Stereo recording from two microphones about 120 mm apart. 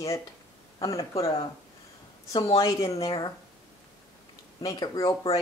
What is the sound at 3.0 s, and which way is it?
Speech, 50° left (ahead or behind).